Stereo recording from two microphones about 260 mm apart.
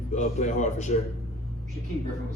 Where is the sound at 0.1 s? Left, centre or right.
Left.